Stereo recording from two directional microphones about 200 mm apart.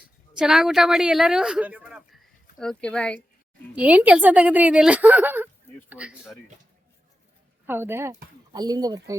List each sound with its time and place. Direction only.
0.3 s speech: 5° right (ahead or behind)
3.8 s a woman's voice: 5° right (ahead or behind)
7.7 s a woman's voice: 10° right (ahead or behind)